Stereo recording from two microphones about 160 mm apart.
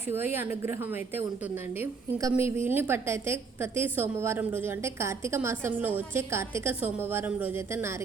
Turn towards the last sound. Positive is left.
turn(degrees=-15)  # may be behind; listen again after turning